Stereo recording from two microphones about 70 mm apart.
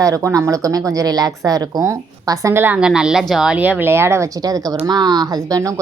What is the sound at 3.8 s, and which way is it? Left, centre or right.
Speech, right.